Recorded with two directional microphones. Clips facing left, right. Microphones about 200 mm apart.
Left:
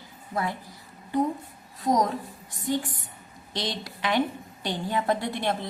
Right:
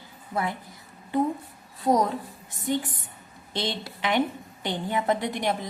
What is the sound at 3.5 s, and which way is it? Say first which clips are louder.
A woman's voice: right 2 dB; 25° right (ahead or behind).